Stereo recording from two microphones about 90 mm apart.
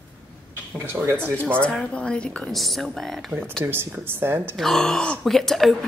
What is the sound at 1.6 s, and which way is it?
Speech, 10° left (ahead or behind).